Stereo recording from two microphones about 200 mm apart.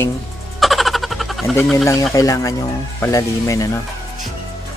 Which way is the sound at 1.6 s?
5° left (ahead or behind).